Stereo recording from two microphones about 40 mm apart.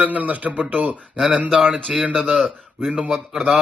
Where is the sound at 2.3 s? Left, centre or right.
Centre.